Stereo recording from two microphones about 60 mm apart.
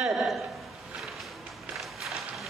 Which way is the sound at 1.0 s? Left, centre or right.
Centre.